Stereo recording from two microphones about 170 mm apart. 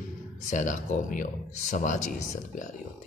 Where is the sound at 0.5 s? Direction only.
50° left (ahead or behind).